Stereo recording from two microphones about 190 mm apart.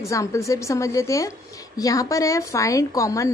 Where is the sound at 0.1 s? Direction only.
15° left (ahead or behind).